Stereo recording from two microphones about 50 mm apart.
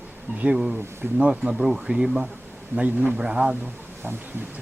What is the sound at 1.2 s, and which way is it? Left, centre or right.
Speech, centre.